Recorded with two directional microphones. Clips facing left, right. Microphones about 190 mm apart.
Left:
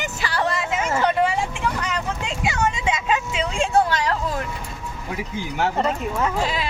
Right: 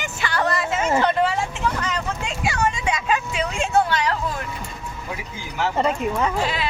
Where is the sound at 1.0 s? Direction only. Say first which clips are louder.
Even; 10° left (ahead or behind); by 4.0 s 30° left (ahead or behind).